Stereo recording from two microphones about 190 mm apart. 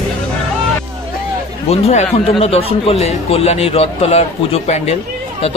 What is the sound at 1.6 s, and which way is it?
A man's voice, 35° left (ahead or behind).